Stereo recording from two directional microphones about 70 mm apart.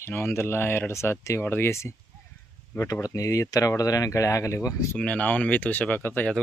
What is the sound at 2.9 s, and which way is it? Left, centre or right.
Speech, left.